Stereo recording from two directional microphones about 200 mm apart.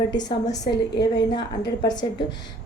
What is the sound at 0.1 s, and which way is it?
A woman's voice, 20° left (ahead or behind).